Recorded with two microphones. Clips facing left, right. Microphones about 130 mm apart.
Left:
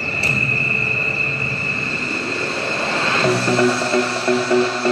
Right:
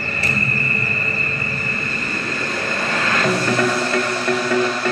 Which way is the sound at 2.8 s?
30° left (ahead or behind).